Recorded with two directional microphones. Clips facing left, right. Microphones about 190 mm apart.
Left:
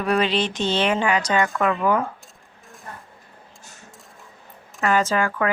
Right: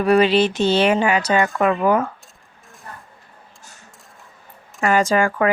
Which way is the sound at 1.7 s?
35° right (ahead or behind).